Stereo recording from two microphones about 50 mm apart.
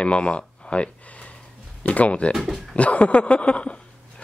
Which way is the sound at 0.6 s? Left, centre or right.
Left.